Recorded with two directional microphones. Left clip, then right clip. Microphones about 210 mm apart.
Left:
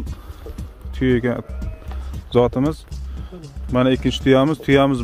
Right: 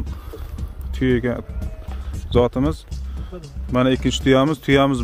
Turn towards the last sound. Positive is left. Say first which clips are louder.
# left 1 dB
turn(degrees=-5)  # may be behind; listen again after turning